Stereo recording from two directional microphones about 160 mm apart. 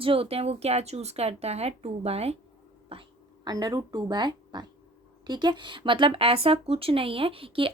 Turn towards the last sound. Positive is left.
turn(degrees=-35)  # may be behind; listen again after turning